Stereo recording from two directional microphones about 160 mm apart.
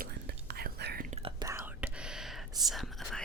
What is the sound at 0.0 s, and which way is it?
Whispering, 85° right.